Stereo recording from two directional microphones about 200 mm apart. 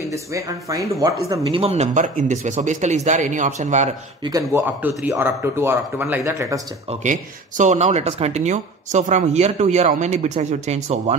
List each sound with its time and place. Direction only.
0.1 s speech: 15° right (ahead or behind)
1.4 s speech: 30° right (ahead or behind)
4.2 s speech: 15° right (ahead or behind)
6.9 s speech: 40° right (ahead or behind)